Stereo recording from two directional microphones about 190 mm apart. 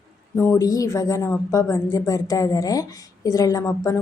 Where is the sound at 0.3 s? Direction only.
15° left (ahead or behind).